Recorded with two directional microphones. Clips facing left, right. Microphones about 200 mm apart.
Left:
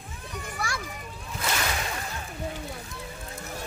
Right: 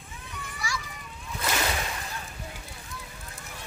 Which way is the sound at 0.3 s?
50° left (ahead or behind).